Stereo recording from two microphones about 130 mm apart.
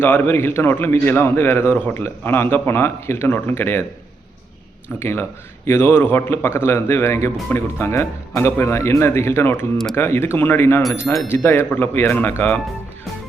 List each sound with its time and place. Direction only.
0.0 s a man's voice: 15° left (ahead or behind)
4.9 s a man's voice: 15° left (ahead or behind)